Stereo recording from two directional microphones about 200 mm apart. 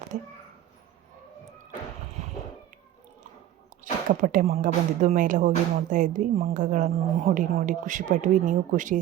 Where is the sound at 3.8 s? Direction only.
40° right (ahead or behind).